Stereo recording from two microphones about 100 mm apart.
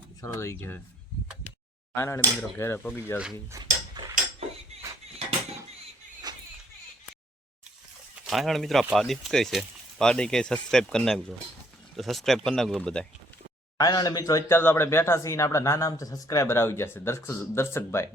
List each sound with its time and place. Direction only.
0.2 s speech: 30° left (ahead or behind)
2.0 s speech: 25° left (ahead or behind)
4.0 s a sound: 40° right (ahead or behind)
6.3 s a sound: 45° right (ahead or behind)
8.2 s speech: centre (ahead or behind)
13.7 s speech: 40° left (ahead or behind)
14.5 s speech: 25° left (ahead or behind)